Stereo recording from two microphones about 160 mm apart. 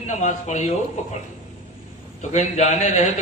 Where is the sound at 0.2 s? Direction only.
50° left (ahead or behind).